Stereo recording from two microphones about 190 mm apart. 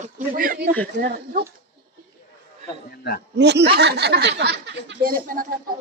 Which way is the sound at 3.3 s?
65° right (ahead or behind).